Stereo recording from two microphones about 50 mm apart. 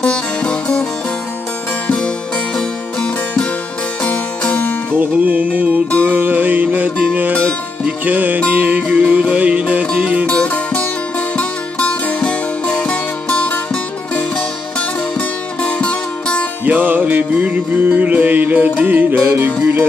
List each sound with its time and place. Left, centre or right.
0.0 s music: left
1.9 s music: left
4.9 s music: right
10.2 s music: left
16.6 s music: right